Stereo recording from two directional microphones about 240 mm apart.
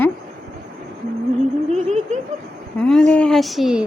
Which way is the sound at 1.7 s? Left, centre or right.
Right.